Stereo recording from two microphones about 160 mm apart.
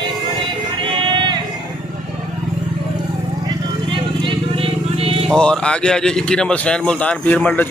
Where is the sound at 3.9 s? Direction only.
35° right (ahead or behind).